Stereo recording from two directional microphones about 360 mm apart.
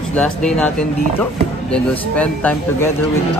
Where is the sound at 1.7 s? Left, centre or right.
Centre.